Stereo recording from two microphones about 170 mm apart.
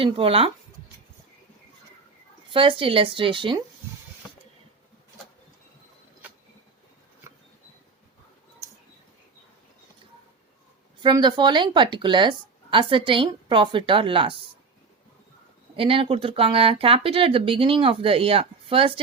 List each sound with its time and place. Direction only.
0.0 s speech: 35° right (ahead or behind)
2.5 s speech: 30° right (ahead or behind)
11.0 s a woman's voice: 25° right (ahead or behind)
15.7 s speech: 30° right (ahead or behind)